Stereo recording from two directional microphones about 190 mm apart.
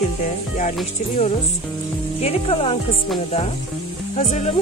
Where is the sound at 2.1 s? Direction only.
30° left (ahead or behind).